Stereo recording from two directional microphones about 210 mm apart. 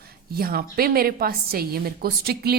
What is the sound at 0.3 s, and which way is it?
A woman's voice, 45° right (ahead or behind).